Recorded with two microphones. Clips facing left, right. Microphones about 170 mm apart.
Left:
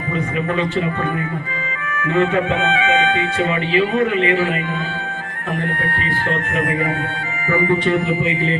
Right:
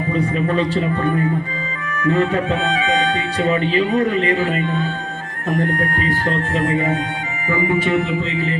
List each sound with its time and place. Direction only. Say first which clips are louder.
0.1 s speech: right 1 dB; 35° right (ahead or behind)
2.0 s speech: even; 35° right (ahead or behind)